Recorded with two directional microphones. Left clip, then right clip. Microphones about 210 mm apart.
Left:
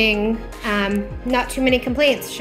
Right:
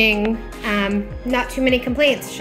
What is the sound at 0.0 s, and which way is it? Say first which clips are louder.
A woman's voice: right 1 dB; centre (ahead or behind).